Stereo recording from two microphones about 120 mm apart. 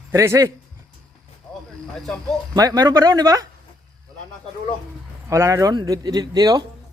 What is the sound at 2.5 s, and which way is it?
Speech, 35° right (ahead or behind).